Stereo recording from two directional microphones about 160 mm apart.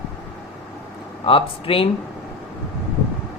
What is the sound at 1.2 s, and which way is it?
Speech, 35° left (ahead or behind).